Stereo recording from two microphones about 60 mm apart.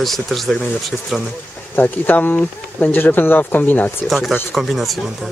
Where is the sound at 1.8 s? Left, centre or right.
Left.